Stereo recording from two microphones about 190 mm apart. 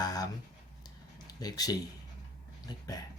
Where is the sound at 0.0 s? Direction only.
20° left (ahead or behind).